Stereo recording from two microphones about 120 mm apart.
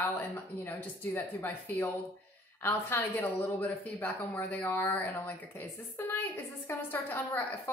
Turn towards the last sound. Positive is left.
turn(degrees=20)  # may be behind; listen again after turning